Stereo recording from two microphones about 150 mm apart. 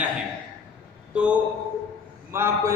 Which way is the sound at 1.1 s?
5° right (ahead or behind).